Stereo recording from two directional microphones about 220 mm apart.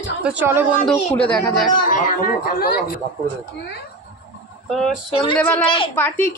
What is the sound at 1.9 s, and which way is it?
Speech, 40° left (ahead or behind).